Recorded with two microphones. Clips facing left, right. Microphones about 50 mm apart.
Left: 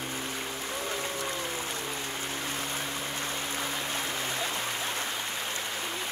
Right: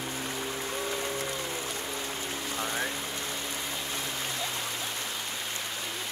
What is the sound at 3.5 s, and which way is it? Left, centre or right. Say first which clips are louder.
Stream: left 2 dB; left.